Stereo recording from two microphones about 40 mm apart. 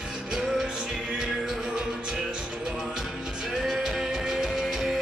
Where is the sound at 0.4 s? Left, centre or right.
Right.